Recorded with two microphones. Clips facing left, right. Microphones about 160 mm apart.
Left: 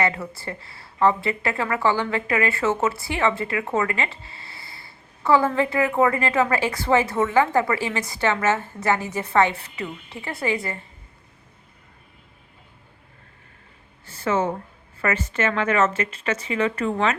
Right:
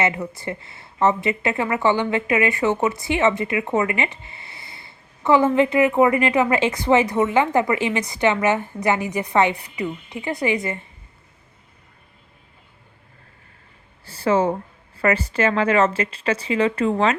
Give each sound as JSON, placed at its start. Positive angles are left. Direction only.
{"t": 0.0, "sound": "speech", "side_deg": -20}
{"t": 14.0, "sound": "a sound", "side_deg": -35}
{"t": 14.9, "sound": "a woman's voice", "side_deg": -35}